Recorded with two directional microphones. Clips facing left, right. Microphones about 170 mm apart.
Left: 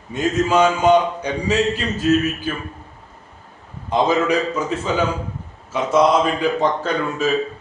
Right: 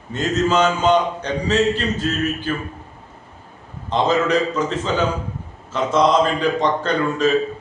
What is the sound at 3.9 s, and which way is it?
A man's voice, 10° left (ahead or behind).